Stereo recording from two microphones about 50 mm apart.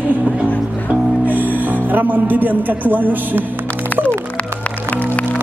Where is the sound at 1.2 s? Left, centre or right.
Right.